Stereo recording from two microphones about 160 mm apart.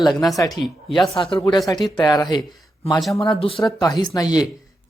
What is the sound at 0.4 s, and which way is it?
Speech, centre (ahead or behind).